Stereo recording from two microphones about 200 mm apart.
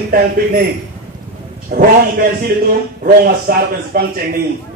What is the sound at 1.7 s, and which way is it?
A man's voice, 45° right (ahead or behind).